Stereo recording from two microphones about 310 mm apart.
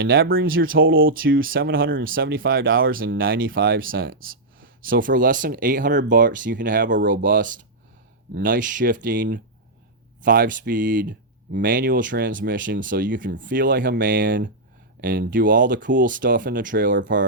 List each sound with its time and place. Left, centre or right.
0.0 s speech: right